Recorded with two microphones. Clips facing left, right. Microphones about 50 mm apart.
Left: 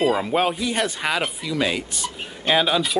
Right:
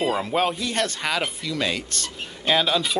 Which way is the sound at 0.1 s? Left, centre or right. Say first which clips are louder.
Left 2 dB; centre.